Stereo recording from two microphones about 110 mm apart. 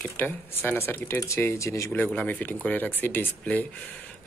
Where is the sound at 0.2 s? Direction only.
20° left (ahead or behind).